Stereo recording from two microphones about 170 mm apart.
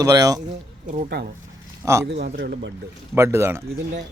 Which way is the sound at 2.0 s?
75° right (ahead or behind).